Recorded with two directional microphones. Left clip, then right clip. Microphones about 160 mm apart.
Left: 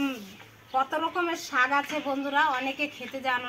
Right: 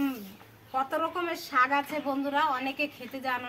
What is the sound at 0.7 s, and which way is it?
A woman's voice, 25° right (ahead or behind).